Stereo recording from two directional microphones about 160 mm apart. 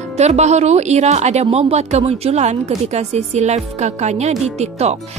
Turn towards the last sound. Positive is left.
turn(degrees=-45)  # may be behind; listen again after turning